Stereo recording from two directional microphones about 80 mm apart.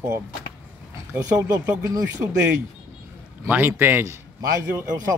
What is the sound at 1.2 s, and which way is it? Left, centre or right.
Speech, right.